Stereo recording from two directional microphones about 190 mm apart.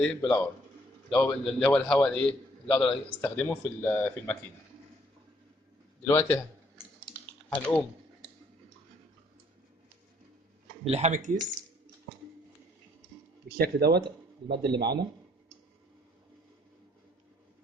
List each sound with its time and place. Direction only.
0.0 s a man's voice: 5° left (ahead or behind)
6.1 s a man's voice: 15° left (ahead or behind)
7.1 s typing: 10° left (ahead or behind)
10.8 s speech: 35° right (ahead or behind)
13.6 s speech: 55° right (ahead or behind)